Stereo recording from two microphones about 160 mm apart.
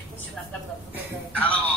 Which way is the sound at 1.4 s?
10° left (ahead or behind).